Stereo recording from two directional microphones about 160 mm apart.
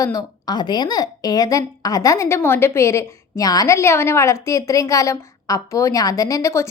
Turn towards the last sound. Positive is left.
turn(degrees=20)  # may be behind; listen again after turning